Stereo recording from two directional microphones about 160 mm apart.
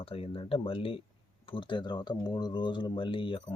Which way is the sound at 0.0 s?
35° left (ahead or behind).